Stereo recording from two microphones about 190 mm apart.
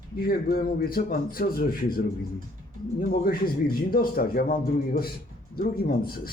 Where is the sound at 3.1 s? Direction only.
50° left (ahead or behind).